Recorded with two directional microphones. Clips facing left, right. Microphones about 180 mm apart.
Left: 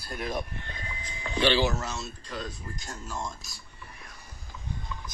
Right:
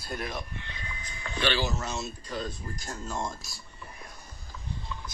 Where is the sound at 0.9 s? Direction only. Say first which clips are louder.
Left 2 dB; 30° left (ahead or behind).